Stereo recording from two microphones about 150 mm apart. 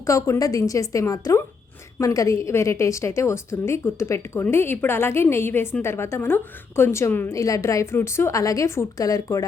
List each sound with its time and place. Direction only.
0.0 s a woman's voice: 20° left (ahead or behind)